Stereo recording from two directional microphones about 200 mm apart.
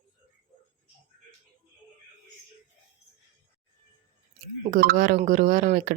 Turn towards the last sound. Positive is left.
turn(degrees=-45)  # may be behind; listen again after turning